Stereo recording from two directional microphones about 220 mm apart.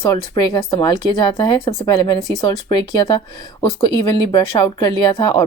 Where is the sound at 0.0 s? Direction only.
20° left (ahead or behind).